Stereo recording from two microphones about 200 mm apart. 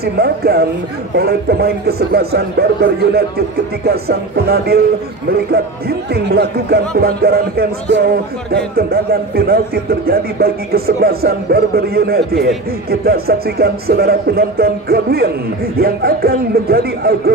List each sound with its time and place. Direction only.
0.0 s a man's voice: 50° right (ahead or behind)